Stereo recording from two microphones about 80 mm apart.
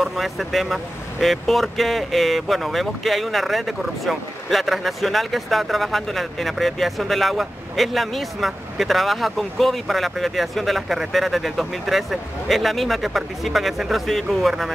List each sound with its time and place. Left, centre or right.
0.0 s speech: centre